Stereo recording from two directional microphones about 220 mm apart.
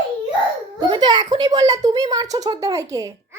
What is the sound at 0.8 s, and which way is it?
A child's voice, 20° right (ahead or behind).